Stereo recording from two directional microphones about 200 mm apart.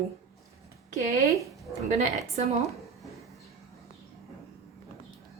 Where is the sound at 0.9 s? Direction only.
35° right (ahead or behind).